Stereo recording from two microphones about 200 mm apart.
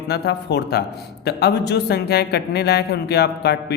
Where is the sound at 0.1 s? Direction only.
55° left (ahead or behind).